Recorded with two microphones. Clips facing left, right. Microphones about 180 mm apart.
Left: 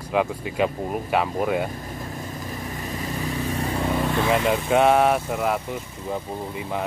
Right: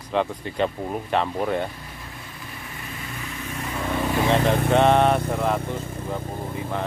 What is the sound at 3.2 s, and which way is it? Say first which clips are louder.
Vehicle: left 7 dB; 35° left (ahead or behind).